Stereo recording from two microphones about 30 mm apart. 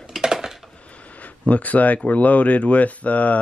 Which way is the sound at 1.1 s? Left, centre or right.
Left.